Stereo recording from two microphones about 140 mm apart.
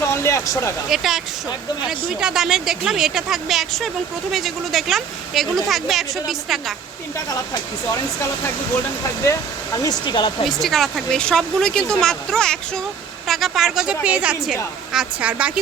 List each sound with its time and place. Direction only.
0.1 s a sound: 20° left (ahead or behind)
0.9 s a woman's voice: centre (ahead or behind)
9.2 s speech: 25° left (ahead or behind)
10.5 s a woman's voice: centre (ahead or behind)